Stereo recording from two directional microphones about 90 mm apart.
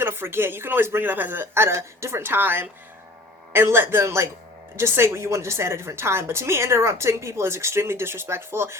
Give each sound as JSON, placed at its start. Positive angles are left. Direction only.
{"t": 0.0, "sound": "a woman's voice", "side_deg": -25}